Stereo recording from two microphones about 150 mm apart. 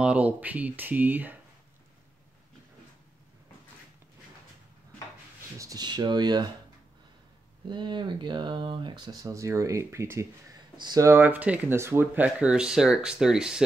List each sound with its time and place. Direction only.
0.0 s speech: 10° right (ahead or behind)
5.6 s speech: 25° right (ahead or behind)
7.6 s speech: 30° right (ahead or behind); by 13.7 s 5° right (ahead or behind)